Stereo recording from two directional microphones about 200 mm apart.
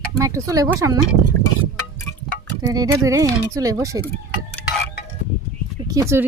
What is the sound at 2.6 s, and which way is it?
Speech, 20° right (ahead or behind).